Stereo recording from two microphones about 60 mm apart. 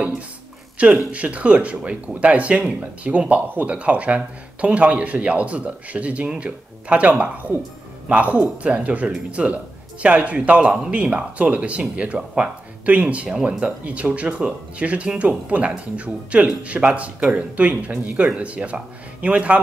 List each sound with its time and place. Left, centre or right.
0.7 s speech: right